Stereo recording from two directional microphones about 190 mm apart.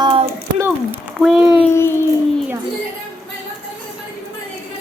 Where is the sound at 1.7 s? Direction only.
15° left (ahead or behind).